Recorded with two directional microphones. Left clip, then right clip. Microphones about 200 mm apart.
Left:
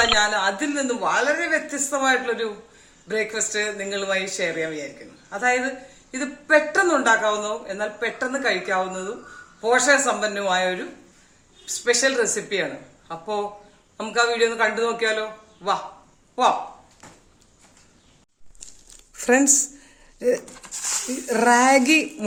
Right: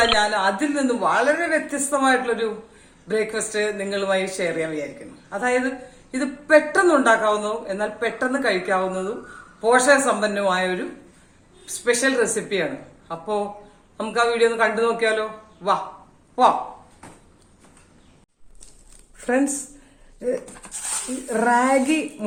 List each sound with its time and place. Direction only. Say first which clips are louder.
0.0 s speech: right 1 dB; 5° left (ahead or behind)
19.1 s a sound: left 4 dB; 55° left (ahead or behind)
20.1 s speech: left 3 dB; 50° left (ahead or behind)